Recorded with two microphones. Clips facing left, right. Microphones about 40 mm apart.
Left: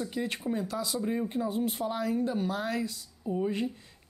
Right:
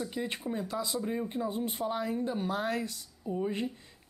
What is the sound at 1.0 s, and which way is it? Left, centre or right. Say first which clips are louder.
Speech: left 2 dB; centre.